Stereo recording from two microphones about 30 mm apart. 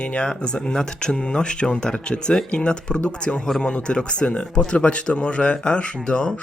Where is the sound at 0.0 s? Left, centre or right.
Left.